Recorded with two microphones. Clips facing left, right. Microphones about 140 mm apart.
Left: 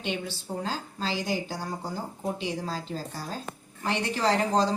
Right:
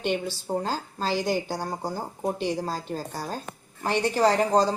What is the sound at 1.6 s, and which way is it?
Speech, 40° right (ahead or behind).